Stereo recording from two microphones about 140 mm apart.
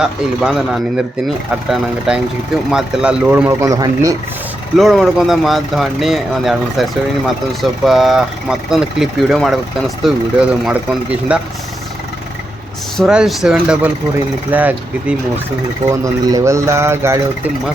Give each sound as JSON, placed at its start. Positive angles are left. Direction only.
{"t": 0.0, "sound": "speech", "side_deg": -5}
{"t": 4.8, "sound": "speech", "side_deg": 0}
{"t": 13.0, "sound": "speech", "side_deg": -5}
{"t": 15.9, "sound": "speech", "side_deg": -25}